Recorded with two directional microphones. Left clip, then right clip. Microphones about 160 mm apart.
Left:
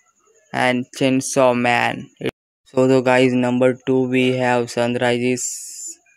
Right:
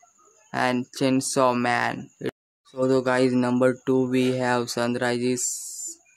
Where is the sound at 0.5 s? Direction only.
15° left (ahead or behind).